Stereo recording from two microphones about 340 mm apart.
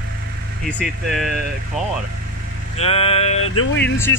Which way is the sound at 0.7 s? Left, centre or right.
Centre.